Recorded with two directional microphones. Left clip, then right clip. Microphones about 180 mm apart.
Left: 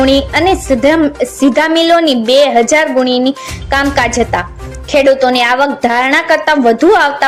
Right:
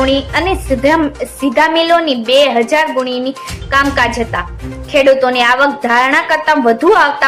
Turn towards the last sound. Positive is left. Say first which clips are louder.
# left 1 dB
turn(degrees=30)  # may be behind; listen again after turning